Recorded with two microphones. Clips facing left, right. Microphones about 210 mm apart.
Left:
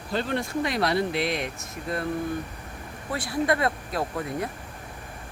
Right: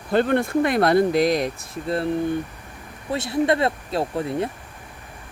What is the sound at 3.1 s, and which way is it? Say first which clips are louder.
Speech: right 5 dB; 25° right (ahead or behind).